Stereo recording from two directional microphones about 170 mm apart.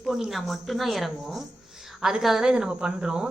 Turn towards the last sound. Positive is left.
turn(degrees=-5)  # may be behind; listen again after turning